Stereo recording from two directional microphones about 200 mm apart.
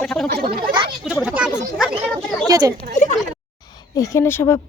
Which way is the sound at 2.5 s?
20° right (ahead or behind).